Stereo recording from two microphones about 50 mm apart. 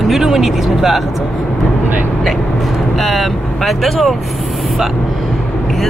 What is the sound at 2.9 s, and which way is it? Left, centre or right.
Speech, centre.